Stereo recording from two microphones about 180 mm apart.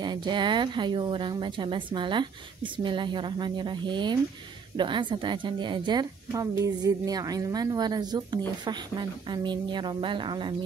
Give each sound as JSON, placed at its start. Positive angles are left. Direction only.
{"t": 0.0, "sound": "a woman's voice", "side_deg": -25}